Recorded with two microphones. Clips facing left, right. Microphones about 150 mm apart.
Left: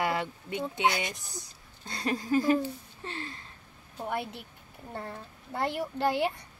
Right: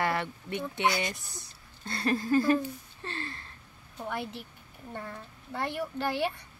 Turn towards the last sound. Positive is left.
turn(degrees=20)  # may be behind; listen again after turning